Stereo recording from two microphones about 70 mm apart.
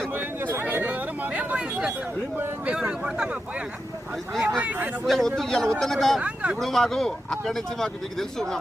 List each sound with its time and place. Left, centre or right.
0.1 s a sound: right
2.6 s speech: centre
4.4 s speech: centre
5.0 s speech: centre
6.1 s speech: centre
6.6 s speech: centre